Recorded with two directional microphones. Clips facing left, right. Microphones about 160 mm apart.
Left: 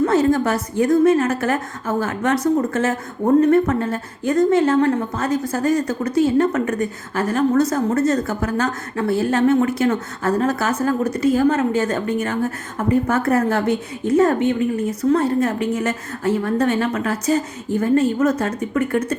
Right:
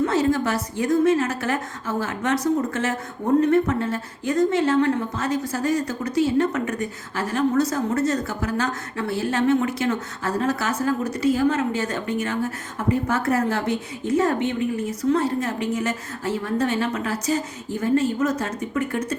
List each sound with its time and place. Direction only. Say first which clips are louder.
0.0 s a woman's voice: left 4 dB; 50° left (ahead or behind)